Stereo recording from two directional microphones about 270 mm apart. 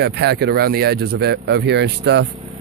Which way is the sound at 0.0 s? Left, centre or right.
Right.